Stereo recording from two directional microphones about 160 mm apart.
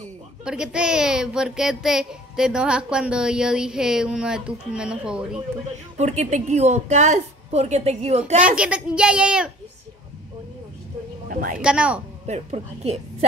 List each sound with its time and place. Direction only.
0.5 s a child's voice: 5° right (ahead or behind)
5.9 s a woman's voice: 45° right (ahead or behind)
8.4 s a woman's voice: 5° right (ahead or behind)
11.6 s a woman's voice: 5° right (ahead or behind)
12.3 s speech: 45° right (ahead or behind)